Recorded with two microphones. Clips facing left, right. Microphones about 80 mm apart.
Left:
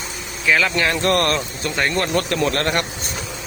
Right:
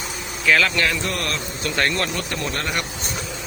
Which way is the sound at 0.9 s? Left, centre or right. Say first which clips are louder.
Left 8 dB; left.